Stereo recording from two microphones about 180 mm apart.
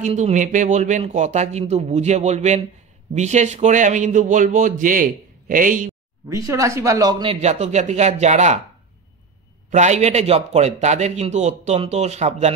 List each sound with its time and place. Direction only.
0.0 s a man's voice: 40° right (ahead or behind)
6.2 s speech: 20° right (ahead or behind)
7.3 s a man's voice: 40° right (ahead or behind)
9.7 s a man's voice: 40° right (ahead or behind)